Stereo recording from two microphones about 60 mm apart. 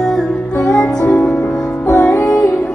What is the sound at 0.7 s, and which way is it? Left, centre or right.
Music, left.